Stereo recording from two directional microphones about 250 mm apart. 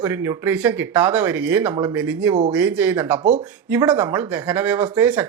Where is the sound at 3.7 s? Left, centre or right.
Centre.